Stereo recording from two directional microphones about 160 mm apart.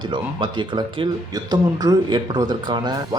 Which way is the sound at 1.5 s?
25° right (ahead or behind).